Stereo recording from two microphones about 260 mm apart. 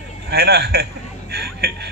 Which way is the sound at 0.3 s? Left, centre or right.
Right.